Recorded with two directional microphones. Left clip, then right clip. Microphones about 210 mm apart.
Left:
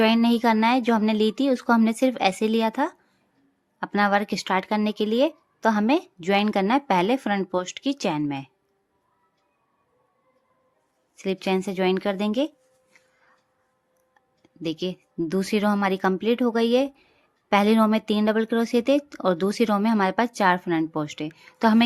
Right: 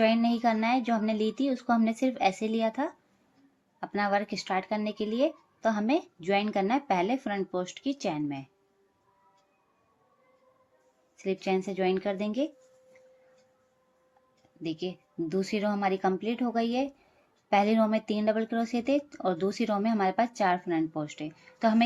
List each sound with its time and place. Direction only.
0.0 s speech: 35° left (ahead or behind)
11.2 s speech: 35° left (ahead or behind)
14.6 s speech: 40° left (ahead or behind)